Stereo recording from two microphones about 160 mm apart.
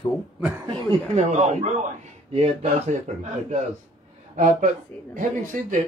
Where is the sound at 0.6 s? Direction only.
40° right (ahead or behind).